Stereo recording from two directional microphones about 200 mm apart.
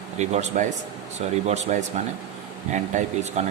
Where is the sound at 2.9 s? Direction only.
35° right (ahead or behind).